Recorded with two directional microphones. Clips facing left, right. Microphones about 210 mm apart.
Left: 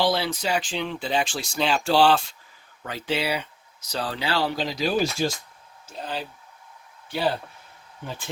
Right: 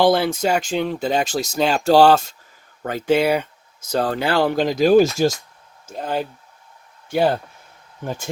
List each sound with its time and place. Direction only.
0.0 s speech: 50° right (ahead or behind)